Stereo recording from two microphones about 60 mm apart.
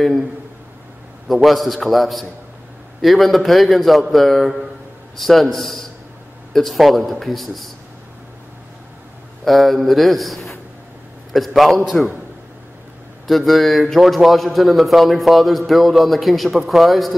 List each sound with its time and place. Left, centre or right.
1.2 s a man's voice: centre
9.4 s a man's voice: centre
13.3 s a man's voice: centre